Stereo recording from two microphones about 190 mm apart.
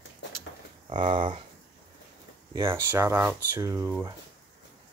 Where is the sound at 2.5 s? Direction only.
15° right (ahead or behind).